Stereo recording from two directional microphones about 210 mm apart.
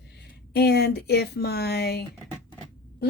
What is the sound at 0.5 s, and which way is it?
Speech, 50° left (ahead or behind).